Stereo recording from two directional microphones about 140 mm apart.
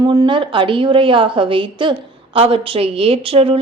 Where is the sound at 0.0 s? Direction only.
30° right (ahead or behind).